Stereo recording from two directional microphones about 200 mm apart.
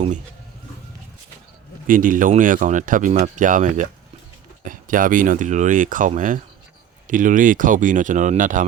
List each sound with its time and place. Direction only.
1.9 s speech: 40° right (ahead or behind)